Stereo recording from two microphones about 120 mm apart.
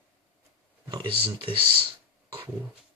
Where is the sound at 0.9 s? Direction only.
45° right (ahead or behind).